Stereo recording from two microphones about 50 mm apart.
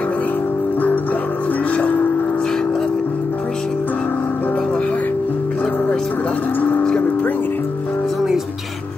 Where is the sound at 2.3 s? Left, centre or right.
Centre.